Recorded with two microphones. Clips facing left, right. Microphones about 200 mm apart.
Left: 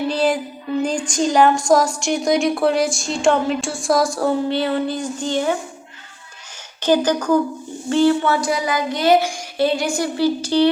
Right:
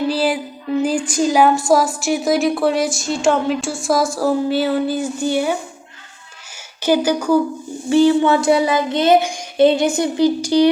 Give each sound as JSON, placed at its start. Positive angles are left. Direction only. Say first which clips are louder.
{"t": 0.1, "sound": "music", "louder": "left 3 dB", "side_deg": -5}
{"t": 0.8, "sound": "a woman's voice", "louder": "right 2 dB", "side_deg": -5}
{"t": 6.8, "sound": "speech", "louder": "right 1 dB", "side_deg": -10}
{"t": 7.9, "sound": "child singing", "louder": "right 3 dB", "side_deg": -15}